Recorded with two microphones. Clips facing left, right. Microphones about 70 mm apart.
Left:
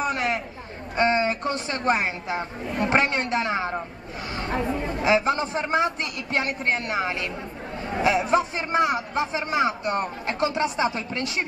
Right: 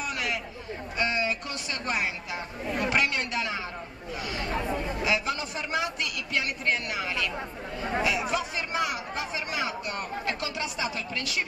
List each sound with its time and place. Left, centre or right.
0.0 s chatter: left
0.9 s a man's voice: left